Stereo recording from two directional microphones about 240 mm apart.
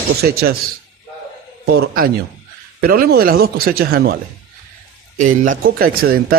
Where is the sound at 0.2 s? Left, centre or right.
Right.